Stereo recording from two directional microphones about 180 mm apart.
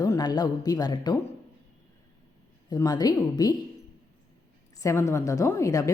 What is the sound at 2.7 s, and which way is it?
Speech, 20° left (ahead or behind).